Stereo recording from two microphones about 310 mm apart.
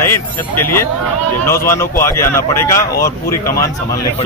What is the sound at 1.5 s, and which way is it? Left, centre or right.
Speech, centre.